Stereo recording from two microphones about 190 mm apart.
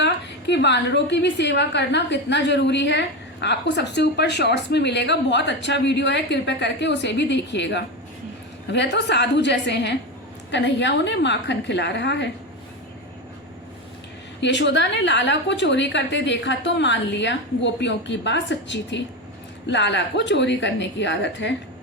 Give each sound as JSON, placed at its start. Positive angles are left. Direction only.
{"t": 0.0, "sound": "a woman's voice", "side_deg": 65}
{"t": 14.4, "sound": "a woman's voice", "side_deg": 70}